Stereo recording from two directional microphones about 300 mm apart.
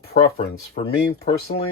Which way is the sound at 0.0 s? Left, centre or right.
Left.